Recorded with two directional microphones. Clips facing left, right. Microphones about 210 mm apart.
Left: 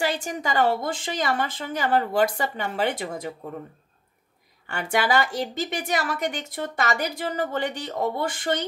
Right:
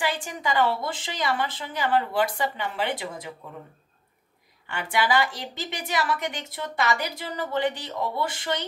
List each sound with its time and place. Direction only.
0.0 s a woman's voice: 40° left (ahead or behind)
4.6 s a woman's voice: 45° left (ahead or behind)